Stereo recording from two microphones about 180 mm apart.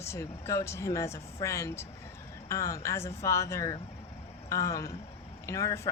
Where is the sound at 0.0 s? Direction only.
15° left (ahead or behind).